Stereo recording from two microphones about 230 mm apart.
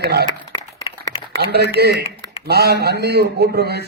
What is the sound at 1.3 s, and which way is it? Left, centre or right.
A man's voice, right.